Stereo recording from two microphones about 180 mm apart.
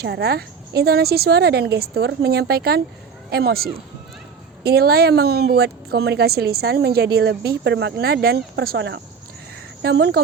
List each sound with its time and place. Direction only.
0.0 s speech: 65° right (ahead or behind)